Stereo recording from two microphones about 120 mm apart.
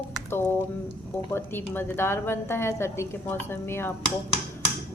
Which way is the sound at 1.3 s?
20° left (ahead or behind).